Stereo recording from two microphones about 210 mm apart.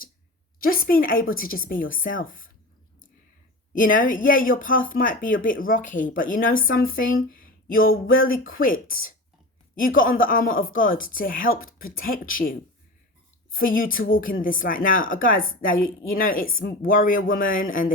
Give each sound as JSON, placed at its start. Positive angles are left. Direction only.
{"t": 0.7, "sound": "speech", "side_deg": 45}
{"t": 3.7, "sound": "speech", "side_deg": 40}
{"t": 13.7, "sound": "speech", "side_deg": 40}